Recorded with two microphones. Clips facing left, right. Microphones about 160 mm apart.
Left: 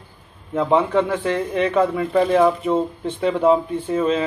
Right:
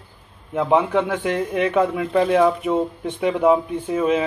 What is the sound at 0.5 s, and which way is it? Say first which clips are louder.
Speech: left 1 dB; 10° right (ahead or behind).